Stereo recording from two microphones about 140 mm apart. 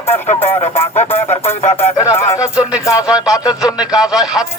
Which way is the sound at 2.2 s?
20° left (ahead or behind).